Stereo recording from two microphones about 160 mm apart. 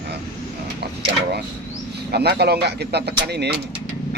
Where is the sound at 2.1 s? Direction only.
90° right.